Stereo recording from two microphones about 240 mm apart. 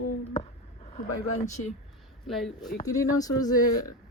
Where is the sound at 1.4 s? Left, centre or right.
Left.